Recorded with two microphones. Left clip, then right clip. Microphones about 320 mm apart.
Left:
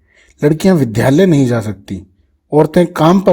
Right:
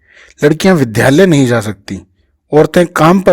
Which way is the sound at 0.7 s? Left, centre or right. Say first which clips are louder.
Right 2 dB; right.